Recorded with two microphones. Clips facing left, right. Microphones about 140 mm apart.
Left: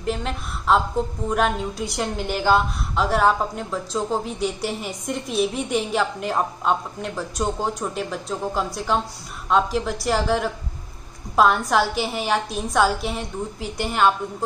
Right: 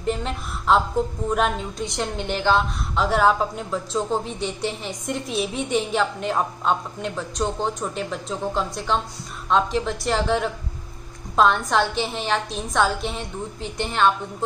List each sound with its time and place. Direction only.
0.0 s a woman's voice: centre (ahead or behind)